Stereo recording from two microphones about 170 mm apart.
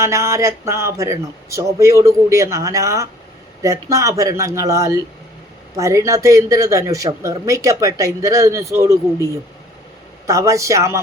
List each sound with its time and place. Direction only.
0.0 s speech: 15° right (ahead or behind)
10.2 s speech: 20° right (ahead or behind)